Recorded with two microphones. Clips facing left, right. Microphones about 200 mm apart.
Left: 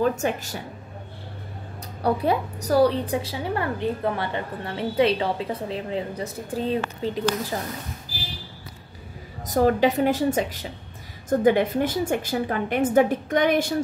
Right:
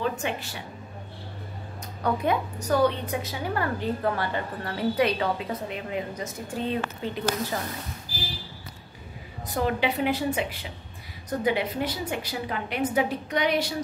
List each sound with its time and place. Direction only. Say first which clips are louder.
0.0 s a woman's voice: left 6 dB; 45° left (ahead or behind)
2.0 s a woman's voice: left 3 dB; 35° left (ahead or behind)
9.5 s a woman's voice: left 7 dB; 40° left (ahead or behind)